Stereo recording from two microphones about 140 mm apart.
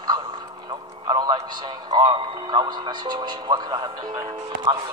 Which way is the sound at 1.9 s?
30° right (ahead or behind).